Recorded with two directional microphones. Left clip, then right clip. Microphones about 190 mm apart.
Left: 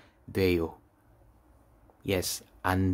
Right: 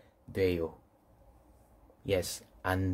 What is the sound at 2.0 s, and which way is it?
Speech, 25° left (ahead or behind).